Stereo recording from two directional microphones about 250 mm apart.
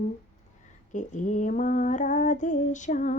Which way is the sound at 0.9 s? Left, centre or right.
Left.